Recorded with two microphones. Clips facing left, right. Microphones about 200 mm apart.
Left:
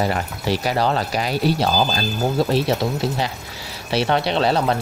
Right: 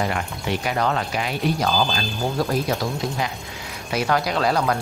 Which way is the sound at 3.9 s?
30° left (ahead or behind).